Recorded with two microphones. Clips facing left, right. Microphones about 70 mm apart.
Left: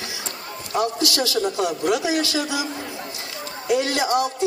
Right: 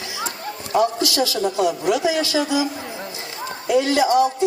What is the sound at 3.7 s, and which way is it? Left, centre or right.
Music, right.